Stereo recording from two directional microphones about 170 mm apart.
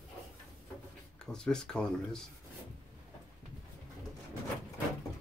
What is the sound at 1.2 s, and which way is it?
Speech, 5° left (ahead or behind).